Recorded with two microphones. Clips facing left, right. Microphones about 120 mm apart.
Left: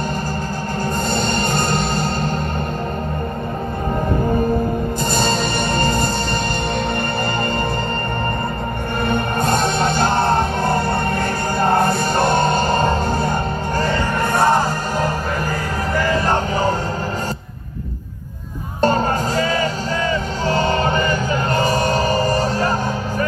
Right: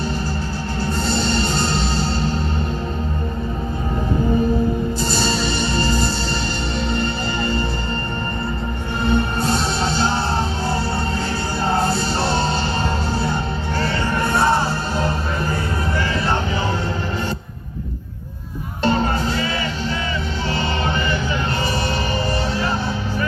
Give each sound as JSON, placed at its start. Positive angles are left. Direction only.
{"t": 1.1, "sound": "music", "side_deg": 50}
{"t": 5.1, "sound": "music", "side_deg": 50}
{"t": 9.0, "sound": "music", "side_deg": 50}
{"t": 16.1, "sound": "a sound", "side_deg": 45}
{"t": 18.8, "sound": "music", "side_deg": 45}